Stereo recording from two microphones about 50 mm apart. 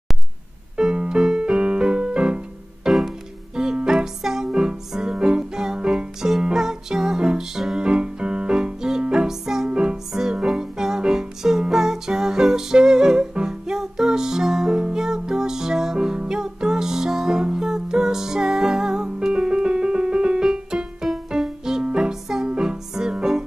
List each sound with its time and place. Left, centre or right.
0.7 s music: centre
10.1 s music: centre